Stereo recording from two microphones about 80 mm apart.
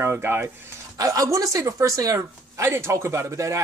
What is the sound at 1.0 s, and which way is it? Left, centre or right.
A woman's voice, right.